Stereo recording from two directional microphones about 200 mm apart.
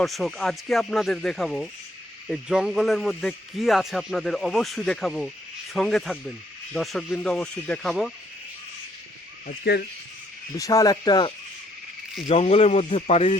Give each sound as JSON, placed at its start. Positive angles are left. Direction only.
{"t": 0.0, "sound": "speech", "side_deg": 0}
{"t": 10.6, "sound": "speech", "side_deg": 15}